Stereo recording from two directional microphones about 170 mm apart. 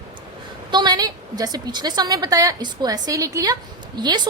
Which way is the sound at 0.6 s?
25° right (ahead or behind).